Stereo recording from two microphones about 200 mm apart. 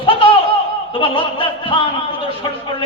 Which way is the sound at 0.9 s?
25° left (ahead or behind).